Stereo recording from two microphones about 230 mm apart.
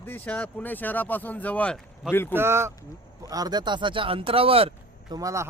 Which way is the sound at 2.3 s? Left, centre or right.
Centre.